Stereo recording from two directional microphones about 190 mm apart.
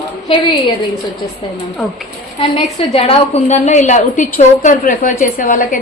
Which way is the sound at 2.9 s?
30° left (ahead or behind).